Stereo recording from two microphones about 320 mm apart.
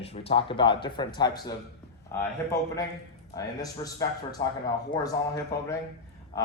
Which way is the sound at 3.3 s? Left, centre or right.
Centre.